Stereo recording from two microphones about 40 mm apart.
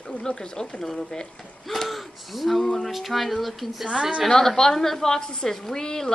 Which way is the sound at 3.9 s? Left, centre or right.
Right.